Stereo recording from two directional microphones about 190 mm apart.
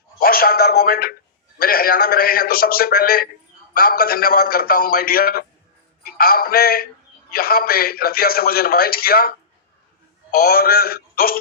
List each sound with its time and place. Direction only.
0.2 s a man's voice: 50° left (ahead or behind)
10.3 s a man's voice: 50° left (ahead or behind)